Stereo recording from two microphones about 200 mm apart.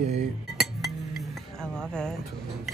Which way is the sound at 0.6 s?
Centre (ahead or behind).